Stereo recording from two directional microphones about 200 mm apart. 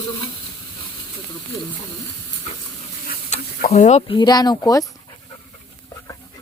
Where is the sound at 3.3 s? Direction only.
40° left (ahead or behind).